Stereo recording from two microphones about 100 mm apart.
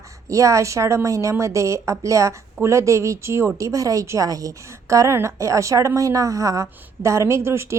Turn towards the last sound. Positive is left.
turn(degrees=-25)  # may be behind; listen again after turning